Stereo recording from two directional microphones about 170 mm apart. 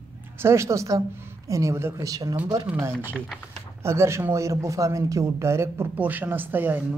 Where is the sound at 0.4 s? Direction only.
15° right (ahead or behind).